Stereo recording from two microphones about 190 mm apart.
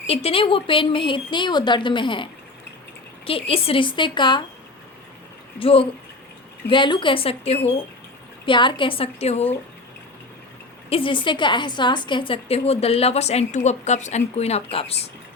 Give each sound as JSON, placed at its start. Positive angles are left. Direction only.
{"t": 0.1, "sound": "speech", "side_deg": 30}
{"t": 3.2, "sound": "speech", "side_deg": 30}
{"t": 5.5, "sound": "speech", "side_deg": 30}
{"t": 10.8, "sound": "a woman's voice", "side_deg": 30}